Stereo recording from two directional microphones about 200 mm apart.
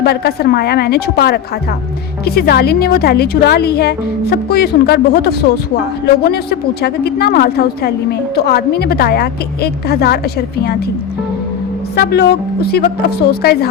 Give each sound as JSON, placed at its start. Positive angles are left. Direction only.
{"t": 0.0, "sound": "a woman's voice", "side_deg": 50}
{"t": 11.9, "sound": "a woman's voice", "side_deg": 55}